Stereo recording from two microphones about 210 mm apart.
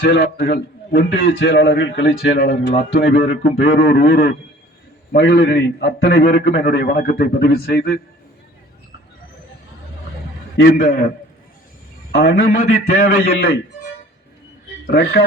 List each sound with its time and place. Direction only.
0.0 s a man's voice: 50° left (ahead or behind)
3.2 s speech: 25° left (ahead or behind)
3.8 s a man's voice: 45° left (ahead or behind)
5.1 s a man's voice: 55° left (ahead or behind)
10.6 s a man's voice: 45° left (ahead or behind)
12.1 s a man's voice: 50° left (ahead or behind)
14.8 s a man's voice: 45° left (ahead or behind)